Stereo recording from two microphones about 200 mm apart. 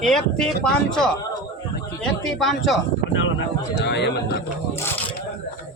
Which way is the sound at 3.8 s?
55° left (ahead or behind).